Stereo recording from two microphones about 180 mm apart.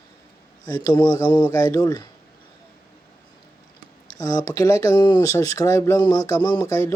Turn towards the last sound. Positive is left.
turn(degrees=15)  # may be behind; listen again after turning